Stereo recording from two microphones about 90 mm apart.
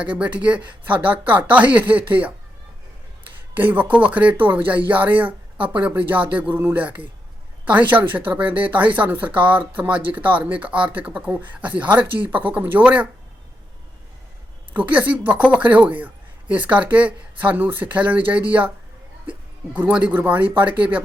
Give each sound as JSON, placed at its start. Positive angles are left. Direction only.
{"t": 0.0, "sound": "speech", "side_deg": -15}
{"t": 3.5, "sound": "speech", "side_deg": -20}
{"t": 14.7, "sound": "speech", "side_deg": -15}